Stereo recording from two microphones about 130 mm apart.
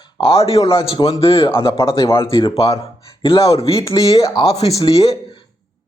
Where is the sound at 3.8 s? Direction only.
25° left (ahead or behind).